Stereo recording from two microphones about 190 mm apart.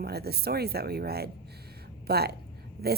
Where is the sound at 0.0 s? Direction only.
55° right (ahead or behind).